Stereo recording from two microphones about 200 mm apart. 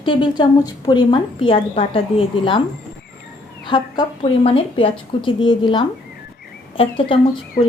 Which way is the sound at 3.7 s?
25° left (ahead or behind).